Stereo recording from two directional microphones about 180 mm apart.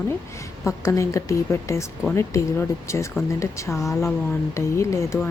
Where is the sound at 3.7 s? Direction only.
Centre (ahead or behind).